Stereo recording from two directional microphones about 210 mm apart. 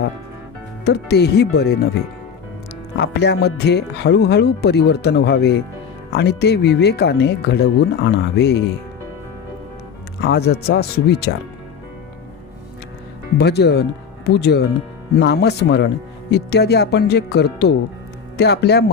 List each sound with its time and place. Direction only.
0.9 s speech: 50° left (ahead or behind)
3.0 s speech: 50° left (ahead or behind)
10.2 s speech: 50° left (ahead or behind)
13.4 s speech: 50° left (ahead or behind)